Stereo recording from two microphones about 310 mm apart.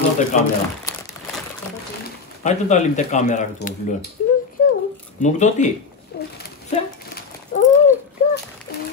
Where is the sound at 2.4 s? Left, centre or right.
Left.